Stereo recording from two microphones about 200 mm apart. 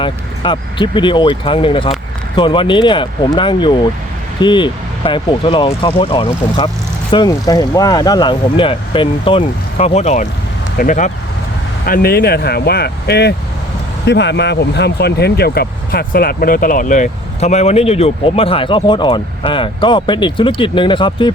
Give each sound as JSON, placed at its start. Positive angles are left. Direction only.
{"t": 0.0, "sound": "speech", "side_deg": 25}
{"t": 11.9, "sound": "speech", "side_deg": 50}